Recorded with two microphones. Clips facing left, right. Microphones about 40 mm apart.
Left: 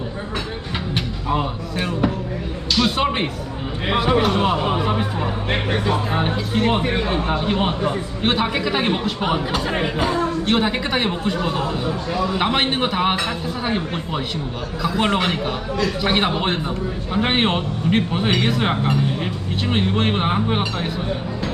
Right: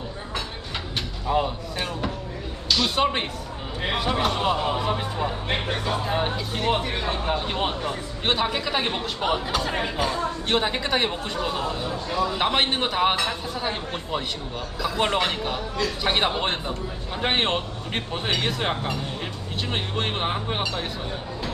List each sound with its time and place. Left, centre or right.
1.3 s a man's voice: centre
10.4 s a man's voice: centre
14.8 s a man's voice: centre